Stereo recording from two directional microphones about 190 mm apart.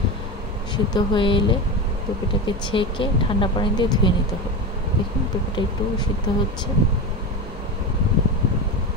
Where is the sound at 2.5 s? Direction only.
25° left (ahead or behind).